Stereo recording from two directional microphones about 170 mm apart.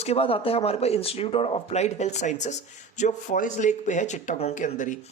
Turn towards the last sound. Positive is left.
turn(degrees=50)  # may be behind; listen again after turning